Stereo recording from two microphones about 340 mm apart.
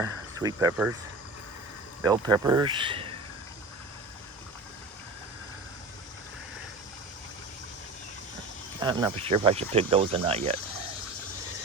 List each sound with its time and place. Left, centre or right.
0.0 s speech: centre
2.0 s speech: centre
8.8 s speech: centre